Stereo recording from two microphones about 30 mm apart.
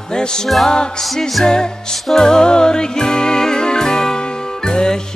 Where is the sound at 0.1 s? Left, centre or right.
Left.